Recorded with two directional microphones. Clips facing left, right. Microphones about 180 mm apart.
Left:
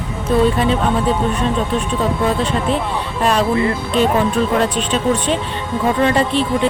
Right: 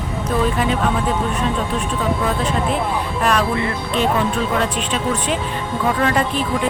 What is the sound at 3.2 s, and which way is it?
Speech, 30° left (ahead or behind).